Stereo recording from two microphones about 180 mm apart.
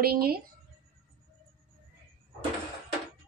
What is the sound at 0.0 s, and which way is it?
Speech, 60° right (ahead or behind).